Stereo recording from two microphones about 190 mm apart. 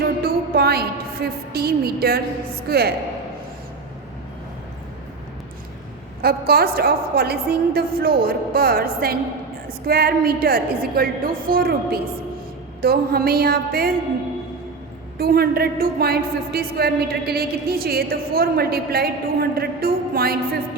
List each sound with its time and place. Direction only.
0.2 s a sound: 55° right (ahead or behind)
2.6 s a woman's voice: 55° right (ahead or behind)
6.2 s speech: 55° right (ahead or behind)
15.2 s speech: 55° right (ahead or behind)